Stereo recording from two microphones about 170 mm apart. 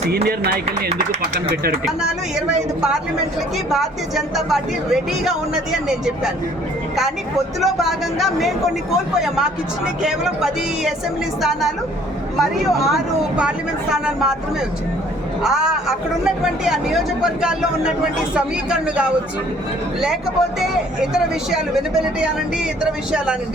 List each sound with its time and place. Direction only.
0.1 s a sound: 65° right (ahead or behind)
0.9 s speech: 65° right (ahead or behind)
1.8 s a woman's voice: 5° right (ahead or behind)
7.6 s a woman's voice: centre (ahead or behind)
12.4 s a woman's voice: centre (ahead or behind)
15.4 s a woman's voice: 5° right (ahead or behind)
20.6 s a woman's voice: 5° right (ahead or behind)